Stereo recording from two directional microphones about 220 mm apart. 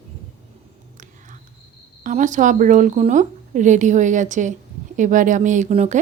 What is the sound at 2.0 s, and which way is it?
Speech, 35° right (ahead or behind).